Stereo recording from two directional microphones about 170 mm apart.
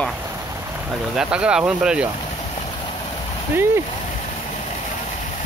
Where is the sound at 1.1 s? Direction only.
5° right (ahead or behind).